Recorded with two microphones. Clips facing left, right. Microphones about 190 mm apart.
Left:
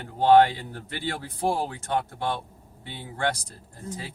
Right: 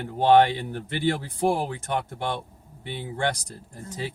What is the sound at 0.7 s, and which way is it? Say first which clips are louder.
Speech: right 7 dB; 25° right (ahead or behind).